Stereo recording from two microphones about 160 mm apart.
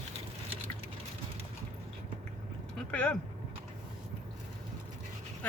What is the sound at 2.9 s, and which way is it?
Speech, 10° left (ahead or behind).